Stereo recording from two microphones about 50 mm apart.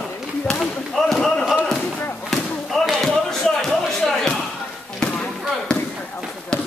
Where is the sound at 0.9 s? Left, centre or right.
Centre.